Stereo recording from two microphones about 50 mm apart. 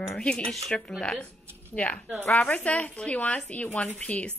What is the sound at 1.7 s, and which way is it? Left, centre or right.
Speech, left.